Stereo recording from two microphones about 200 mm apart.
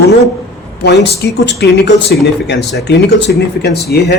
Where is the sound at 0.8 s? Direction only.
60° left (ahead or behind).